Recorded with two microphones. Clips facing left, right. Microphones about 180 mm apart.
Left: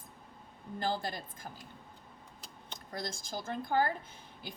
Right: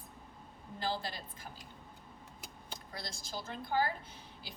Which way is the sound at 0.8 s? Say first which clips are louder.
Left 3 dB; 50° left (ahead or behind).